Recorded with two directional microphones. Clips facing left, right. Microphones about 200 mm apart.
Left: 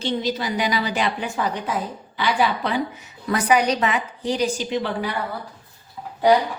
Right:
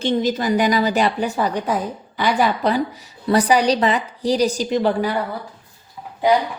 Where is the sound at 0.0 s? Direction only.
45° right (ahead or behind).